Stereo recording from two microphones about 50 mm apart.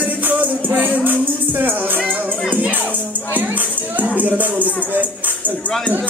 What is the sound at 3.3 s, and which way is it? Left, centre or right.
Music, right.